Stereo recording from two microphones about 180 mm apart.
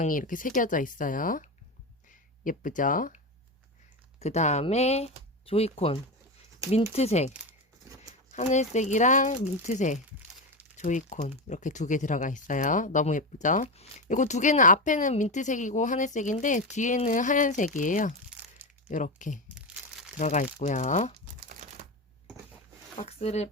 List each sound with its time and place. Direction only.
0.0 s speech: 50° left (ahead or behind)
4.2 s speech: 40° left (ahead or behind)
19.5 s crumpling: 5° right (ahead or behind)
20.1 s speech: 45° left (ahead or behind)
23.0 s speech: 35° left (ahead or behind)